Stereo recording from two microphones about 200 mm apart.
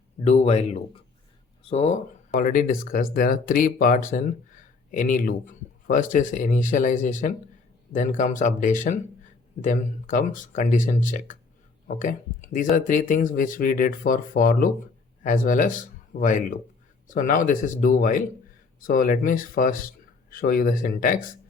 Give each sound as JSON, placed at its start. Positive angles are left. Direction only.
{"t": 0.3, "sound": "speech", "side_deg": 30}
{"t": 2.3, "sound": "speech", "side_deg": 40}